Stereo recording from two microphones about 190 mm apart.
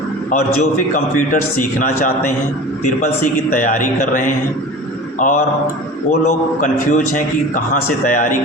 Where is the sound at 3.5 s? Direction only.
45° left (ahead or behind).